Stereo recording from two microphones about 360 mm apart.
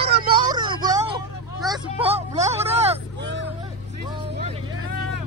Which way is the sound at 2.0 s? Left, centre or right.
Centre.